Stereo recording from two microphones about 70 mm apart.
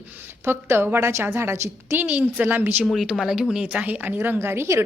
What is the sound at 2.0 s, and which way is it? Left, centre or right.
Speech, right.